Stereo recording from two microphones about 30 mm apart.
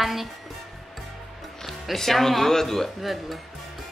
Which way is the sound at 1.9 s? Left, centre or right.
Centre.